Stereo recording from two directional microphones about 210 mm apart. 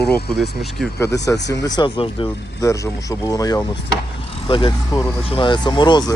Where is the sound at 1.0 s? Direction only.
15° left (ahead or behind).